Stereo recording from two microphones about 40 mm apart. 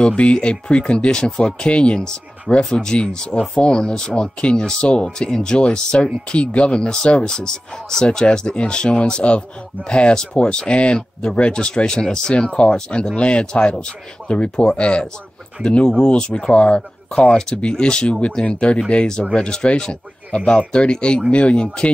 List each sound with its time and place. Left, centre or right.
0.0 s speech: left